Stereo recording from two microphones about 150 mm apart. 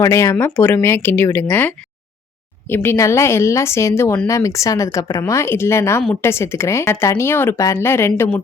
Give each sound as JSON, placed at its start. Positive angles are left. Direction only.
{"t": 0.0, "sound": "a woman's voice", "side_deg": 20}